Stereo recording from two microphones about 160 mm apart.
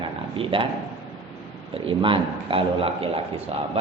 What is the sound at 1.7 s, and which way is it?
A man's voice, 30° right (ahead or behind).